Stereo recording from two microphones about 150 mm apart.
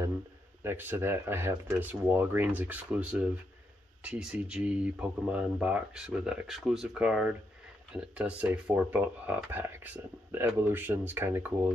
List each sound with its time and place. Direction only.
0.7 s speech: 15° right (ahead or behind)